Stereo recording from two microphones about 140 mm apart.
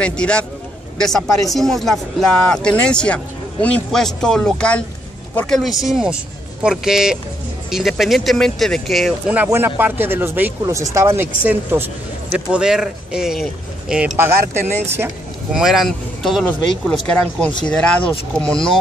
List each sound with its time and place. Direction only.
0.0 s a man's voice: 5° left (ahead or behind)
5.6 s speech: centre (ahead or behind)
9.3 s speech: 15° right (ahead or behind)
12.3 s speech: 5° right (ahead or behind)
15.5 s speech: 5° right (ahead or behind)